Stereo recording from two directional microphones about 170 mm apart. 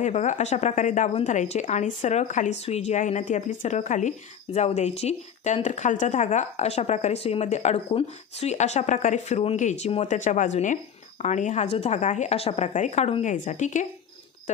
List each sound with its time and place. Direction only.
0.0 s speech: 45° left (ahead or behind)